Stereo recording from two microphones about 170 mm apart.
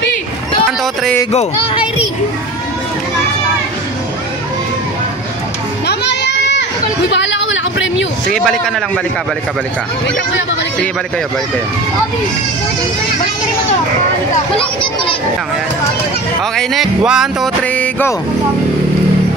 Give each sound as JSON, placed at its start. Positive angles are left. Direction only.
{"t": 5.9, "sound": "music", "side_deg": 85}
{"t": 7.1, "sound": "a sound", "side_deg": 90}
{"t": 8.3, "sound": "music", "side_deg": 0}
{"t": 16.5, "sound": "music", "side_deg": 0}
{"t": 17.6, "sound": "music", "side_deg": 10}